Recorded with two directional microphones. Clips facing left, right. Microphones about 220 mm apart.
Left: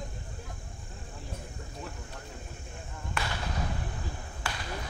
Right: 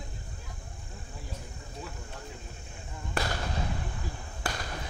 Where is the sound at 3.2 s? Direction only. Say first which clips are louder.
Right 4 dB; 40° right (ahead or behind).